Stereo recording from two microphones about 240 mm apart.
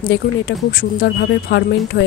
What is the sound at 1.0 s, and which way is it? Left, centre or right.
Speech, left.